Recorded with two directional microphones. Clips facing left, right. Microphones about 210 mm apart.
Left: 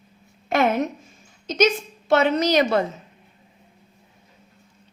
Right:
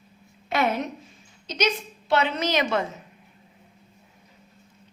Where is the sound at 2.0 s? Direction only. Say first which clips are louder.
Left 5 dB; 45° left (ahead or behind).